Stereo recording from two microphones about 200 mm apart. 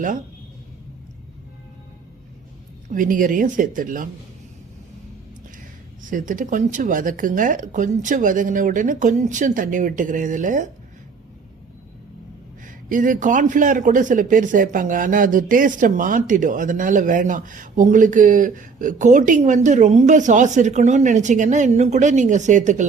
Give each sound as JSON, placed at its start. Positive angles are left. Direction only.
{"t": 2.9, "sound": "a man's voice", "side_deg": -40}
{"t": 6.1, "sound": "a man's voice", "side_deg": -40}
{"t": 12.6, "sound": "a man's voice", "side_deg": -40}